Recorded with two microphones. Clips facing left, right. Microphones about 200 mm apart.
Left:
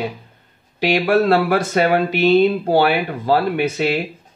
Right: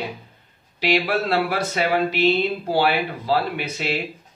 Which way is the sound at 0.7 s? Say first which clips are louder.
Left 6 dB; 50° left (ahead or behind).